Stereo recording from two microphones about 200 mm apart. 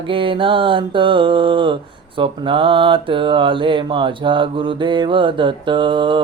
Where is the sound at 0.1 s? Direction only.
25° right (ahead or behind).